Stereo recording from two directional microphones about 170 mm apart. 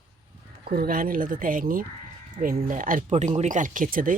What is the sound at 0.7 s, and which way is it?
Speech, 60° right (ahead or behind).